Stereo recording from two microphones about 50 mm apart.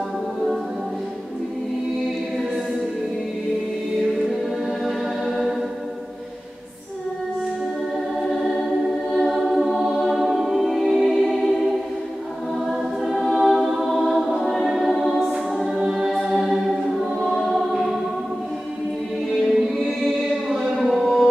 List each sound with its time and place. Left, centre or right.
4.6 s music: centre
8.2 s music: centre
13.0 s choir: centre
13.8 s music: centre
15.2 s music: centre
17.3 s choir: centre
19.3 s music: centre
19.7 s choir: centre
20.7 s music: centre